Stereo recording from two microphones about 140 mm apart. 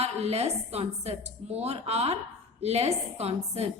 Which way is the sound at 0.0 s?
50° right (ahead or behind).